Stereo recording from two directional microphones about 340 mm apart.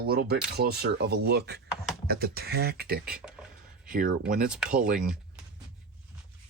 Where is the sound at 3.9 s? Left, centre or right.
Right.